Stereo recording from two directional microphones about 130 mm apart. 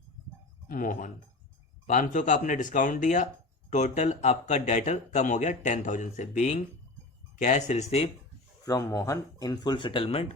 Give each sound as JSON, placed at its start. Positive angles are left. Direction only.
{"t": 0.7, "sound": "speech", "side_deg": 90}
{"t": 1.9, "sound": "speech", "side_deg": 75}
{"t": 8.6, "sound": "speech", "side_deg": 25}